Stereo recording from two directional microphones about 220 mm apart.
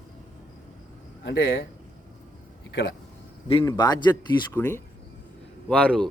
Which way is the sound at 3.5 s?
20° left (ahead or behind).